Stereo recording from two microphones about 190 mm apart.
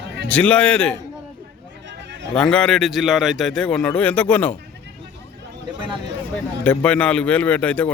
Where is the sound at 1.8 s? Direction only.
70° right (ahead or behind).